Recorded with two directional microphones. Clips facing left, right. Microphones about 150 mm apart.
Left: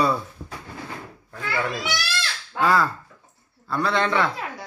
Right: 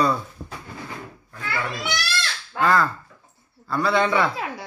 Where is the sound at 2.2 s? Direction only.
5° left (ahead or behind).